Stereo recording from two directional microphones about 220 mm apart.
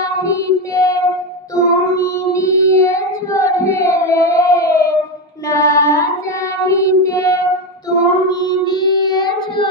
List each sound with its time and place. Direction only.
0.0 s child singing: 15° left (ahead or behind)